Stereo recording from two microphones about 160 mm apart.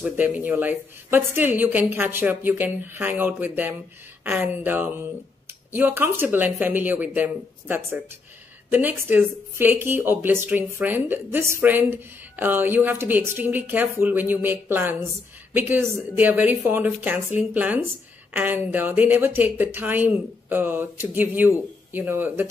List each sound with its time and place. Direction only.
0.0 s a woman's voice: 10° right (ahead or behind)